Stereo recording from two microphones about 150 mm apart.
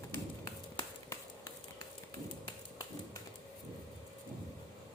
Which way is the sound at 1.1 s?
25° left (ahead or behind).